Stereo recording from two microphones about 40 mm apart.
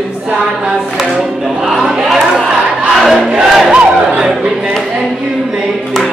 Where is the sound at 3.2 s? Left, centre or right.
Right.